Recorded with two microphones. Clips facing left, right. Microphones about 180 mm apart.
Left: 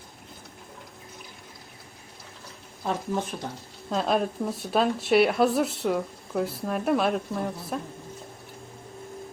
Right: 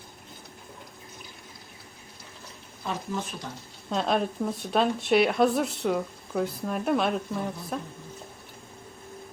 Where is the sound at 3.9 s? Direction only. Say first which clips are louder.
Left 1 dB; centre (ahead or behind).